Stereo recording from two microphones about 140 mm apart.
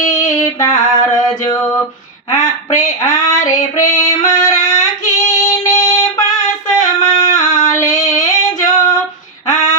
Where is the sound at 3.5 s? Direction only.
65° left (ahead or behind).